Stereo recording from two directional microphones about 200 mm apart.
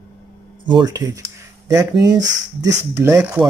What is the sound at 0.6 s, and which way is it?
Speech, 20° right (ahead or behind).